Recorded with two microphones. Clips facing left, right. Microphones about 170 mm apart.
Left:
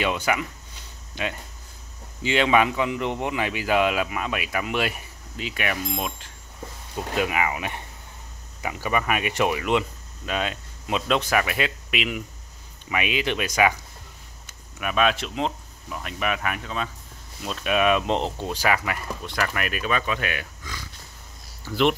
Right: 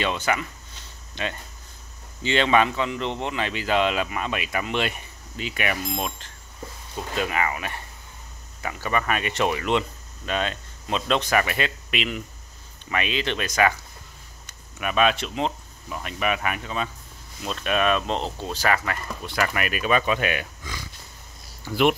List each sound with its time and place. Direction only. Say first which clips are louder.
0.0 s speech: left 1 dB; 10° left (ahead or behind)
14.4 s speech: right 1 dB; centre (ahead or behind)
19.2 s speech: right 2 dB; 5° right (ahead or behind)